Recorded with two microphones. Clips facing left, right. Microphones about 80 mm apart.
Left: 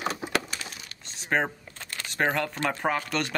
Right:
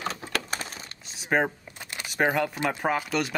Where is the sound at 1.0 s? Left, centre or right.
Centre.